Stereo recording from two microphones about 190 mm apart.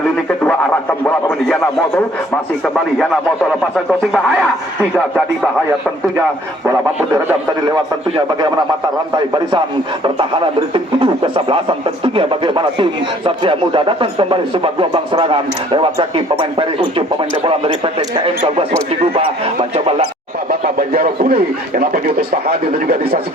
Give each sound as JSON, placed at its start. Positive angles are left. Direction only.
{"t": 0.4, "sound": "speech", "side_deg": 10}
{"t": 8.1, "sound": "a man's voice", "side_deg": -25}
{"t": 20.5, "sound": "a man's voice", "side_deg": -50}